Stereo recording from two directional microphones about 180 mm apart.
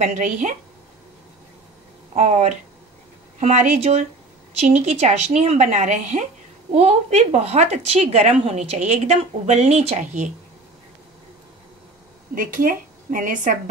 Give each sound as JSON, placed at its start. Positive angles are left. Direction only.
{"t": 0.0, "sound": "speech", "side_deg": -40}
{"t": 2.1, "sound": "speech", "side_deg": -40}
{"t": 12.4, "sound": "speech", "side_deg": -50}